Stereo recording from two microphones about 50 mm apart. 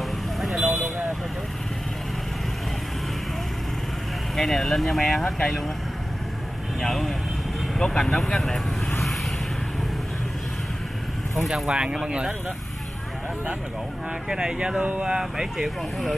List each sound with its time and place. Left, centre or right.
0.4 s vehicle: centre
4.4 s speech: centre
6.8 s speech: centre
11.3 s speech: centre
14.3 s speech: centre